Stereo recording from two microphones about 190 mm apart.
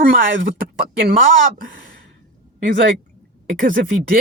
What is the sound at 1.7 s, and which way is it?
Speech, 45° right (ahead or behind).